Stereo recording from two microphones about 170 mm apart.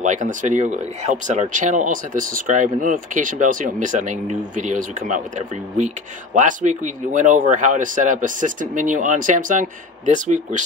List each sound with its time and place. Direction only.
0.0 s speech: 50° right (ahead or behind)
6.3 s speech: 45° right (ahead or behind)